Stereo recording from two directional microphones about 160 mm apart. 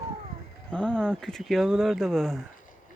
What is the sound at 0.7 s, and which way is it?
Speech, 5° left (ahead or behind).